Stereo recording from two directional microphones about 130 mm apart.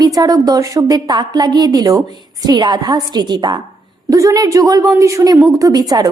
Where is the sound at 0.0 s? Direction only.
30° right (ahead or behind).